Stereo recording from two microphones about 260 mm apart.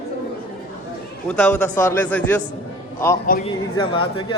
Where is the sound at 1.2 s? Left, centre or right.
Centre.